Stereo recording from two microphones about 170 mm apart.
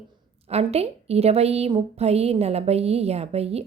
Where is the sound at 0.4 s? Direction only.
35° right (ahead or behind).